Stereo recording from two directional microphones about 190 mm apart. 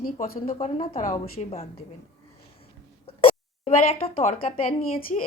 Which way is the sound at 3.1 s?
30° left (ahead or behind).